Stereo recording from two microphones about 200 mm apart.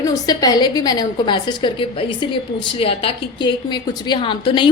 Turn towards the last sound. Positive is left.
turn(degrees=25)  # may be behind; listen again after turning